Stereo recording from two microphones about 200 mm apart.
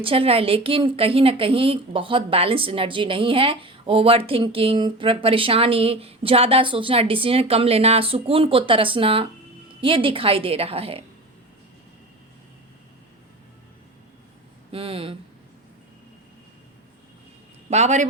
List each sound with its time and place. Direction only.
0.0 s a woman's voice: 25° right (ahead or behind)
14.7 s a woman's voice: 25° right (ahead or behind)
17.7 s a man's voice: 35° right (ahead or behind)